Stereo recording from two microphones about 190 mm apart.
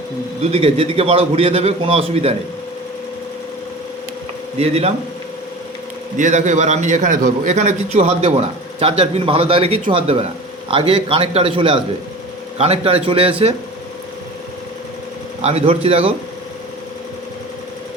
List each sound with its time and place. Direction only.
0.5 s a man's voice: 30° right (ahead or behind)
4.5 s a man's voice: 35° right (ahead or behind)
6.1 s a man's voice: 40° right (ahead or behind)
15.4 s a man's voice: 35° right (ahead or behind)